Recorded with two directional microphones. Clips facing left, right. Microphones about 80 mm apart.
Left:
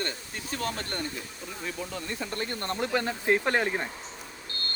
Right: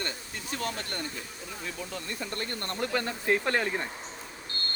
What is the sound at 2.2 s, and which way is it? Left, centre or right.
Speech, centre.